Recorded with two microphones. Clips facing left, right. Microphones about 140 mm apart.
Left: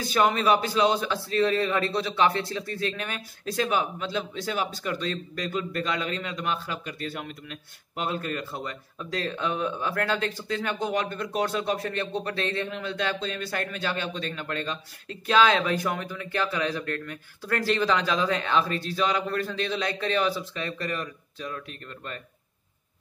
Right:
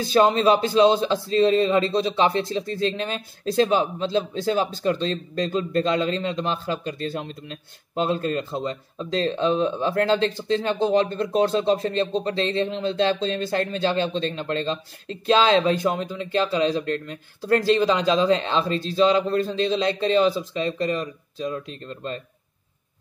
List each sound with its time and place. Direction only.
0.0 s speech: 25° right (ahead or behind)